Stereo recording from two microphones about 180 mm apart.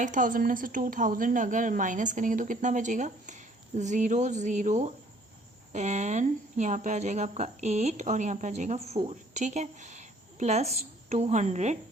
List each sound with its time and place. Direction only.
0.0 s a woman's voice: 45° right (ahead or behind)